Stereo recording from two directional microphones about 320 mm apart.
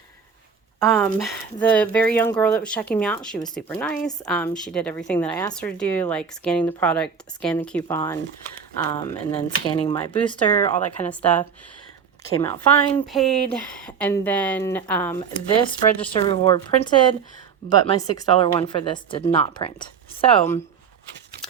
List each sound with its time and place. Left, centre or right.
0.8 s speech: centre
13.1 s speech: centre